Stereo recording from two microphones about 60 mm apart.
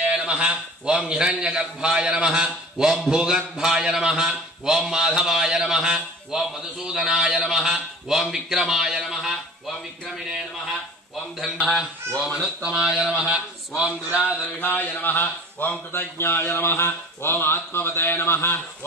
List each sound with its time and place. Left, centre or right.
0.0 s a man's voice: right
12.3 s speech: left
12.7 s speech: centre
14.1 s a man's voice: left